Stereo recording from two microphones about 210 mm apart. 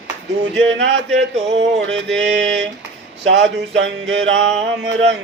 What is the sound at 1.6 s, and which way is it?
Mantra, 60° right (ahead or behind).